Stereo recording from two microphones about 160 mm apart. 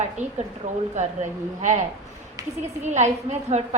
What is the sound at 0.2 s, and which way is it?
Speech, 50° right (ahead or behind).